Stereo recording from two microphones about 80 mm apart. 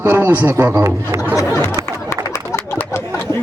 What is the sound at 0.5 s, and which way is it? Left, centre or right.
Speech, right.